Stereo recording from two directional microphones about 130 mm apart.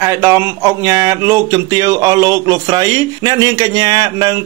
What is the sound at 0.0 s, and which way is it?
Speech, 25° right (ahead or behind).